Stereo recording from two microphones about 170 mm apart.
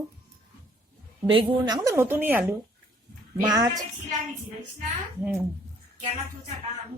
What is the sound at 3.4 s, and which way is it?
Speech, 20° right (ahead or behind).